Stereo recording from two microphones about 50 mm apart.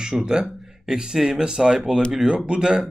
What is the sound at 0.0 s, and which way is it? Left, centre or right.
Speech, centre.